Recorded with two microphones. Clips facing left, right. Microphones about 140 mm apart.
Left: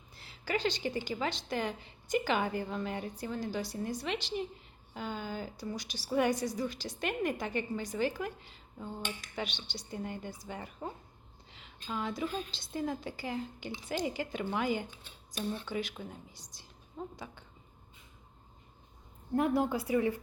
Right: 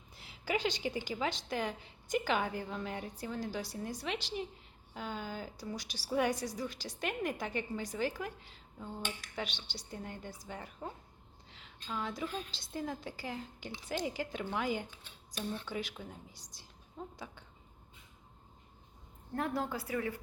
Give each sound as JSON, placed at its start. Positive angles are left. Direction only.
{"t": 0.2, "sound": "speech", "side_deg": -15}
{"t": 19.3, "sound": "a woman's voice", "side_deg": 15}